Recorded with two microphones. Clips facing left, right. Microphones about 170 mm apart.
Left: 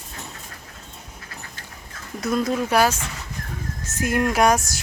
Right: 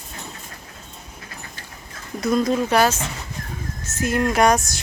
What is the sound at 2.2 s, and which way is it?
Speech, 5° left (ahead or behind).